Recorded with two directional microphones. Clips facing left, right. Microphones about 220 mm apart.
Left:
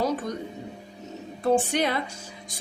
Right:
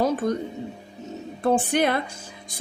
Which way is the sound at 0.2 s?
55° right (ahead or behind).